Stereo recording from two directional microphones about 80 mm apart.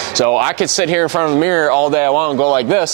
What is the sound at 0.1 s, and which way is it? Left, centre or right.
A man's voice, centre.